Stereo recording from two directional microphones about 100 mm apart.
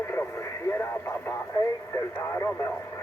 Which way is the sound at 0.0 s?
25° left (ahead or behind).